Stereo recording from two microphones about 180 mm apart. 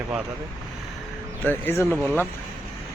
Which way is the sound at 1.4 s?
10° left (ahead or behind).